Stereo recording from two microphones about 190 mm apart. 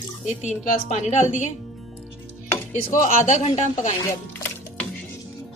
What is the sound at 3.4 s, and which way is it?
Speech, 40° left (ahead or behind).